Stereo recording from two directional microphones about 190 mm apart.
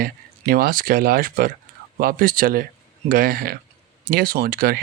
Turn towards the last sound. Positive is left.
turn(degrees=-55)  # may be behind; listen again after turning